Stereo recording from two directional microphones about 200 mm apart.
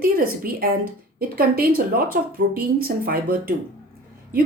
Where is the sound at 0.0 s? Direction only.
45° right (ahead or behind).